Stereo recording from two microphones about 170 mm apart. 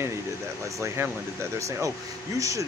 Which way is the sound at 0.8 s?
15° right (ahead or behind).